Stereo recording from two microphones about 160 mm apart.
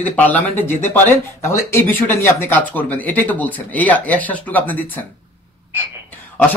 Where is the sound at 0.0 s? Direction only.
10° left (ahead or behind).